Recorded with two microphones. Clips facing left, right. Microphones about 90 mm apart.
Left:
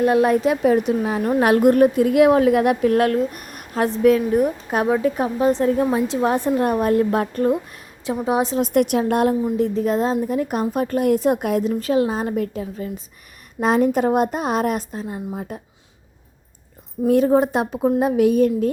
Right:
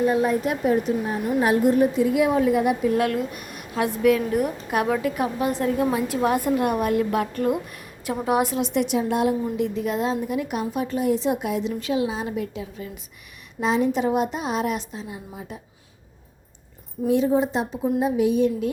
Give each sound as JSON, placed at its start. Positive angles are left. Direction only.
{"t": 0.0, "sound": "a woman's voice", "side_deg": 70}
{"t": 1.4, "sound": "a woman's voice", "side_deg": 70}
{"t": 3.0, "sound": "speech", "side_deg": 45}
{"t": 3.8, "sound": "a woman's voice", "side_deg": 35}
{"t": 8.5, "sound": "a woman's voice", "side_deg": 50}
{"t": 9.6, "sound": "a woman's voice", "side_deg": 35}
{"t": 17.1, "sound": "a woman's voice", "side_deg": 55}